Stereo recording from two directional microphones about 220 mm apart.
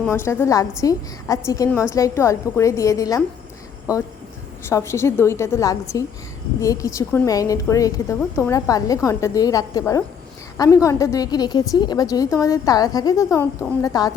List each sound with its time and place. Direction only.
0.0 s a woman's voice: 10° left (ahead or behind)